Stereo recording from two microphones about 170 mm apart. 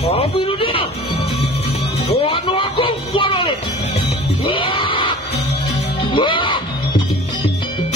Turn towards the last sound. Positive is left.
turn(degrees=30)  # may be behind; listen again after turning